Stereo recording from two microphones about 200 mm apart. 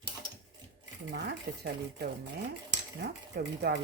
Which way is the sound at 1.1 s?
55° right (ahead or behind).